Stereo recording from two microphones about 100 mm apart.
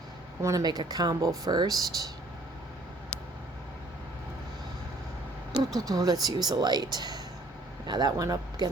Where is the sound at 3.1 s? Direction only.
15° left (ahead or behind).